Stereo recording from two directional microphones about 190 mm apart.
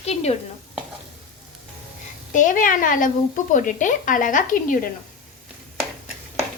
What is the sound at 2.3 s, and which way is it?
Speech, 45° left (ahead or behind).